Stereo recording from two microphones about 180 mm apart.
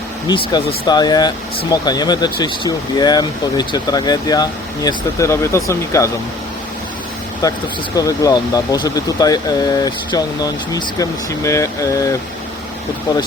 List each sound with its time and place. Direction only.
0.3 s speech: 25° left (ahead or behind)
7.4 s speech: 20° left (ahead or behind)